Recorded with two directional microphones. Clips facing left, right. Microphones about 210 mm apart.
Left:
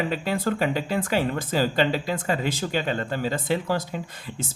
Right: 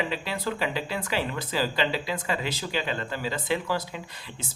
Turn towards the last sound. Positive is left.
turn(degrees=45)  # may be behind; listen again after turning